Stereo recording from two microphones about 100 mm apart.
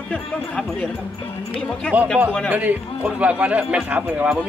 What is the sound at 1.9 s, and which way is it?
Speech, 15° right (ahead or behind).